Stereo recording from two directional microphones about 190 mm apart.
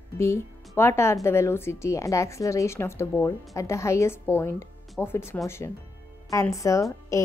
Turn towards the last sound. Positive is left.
turn(degrees=15)  # may be behind; listen again after turning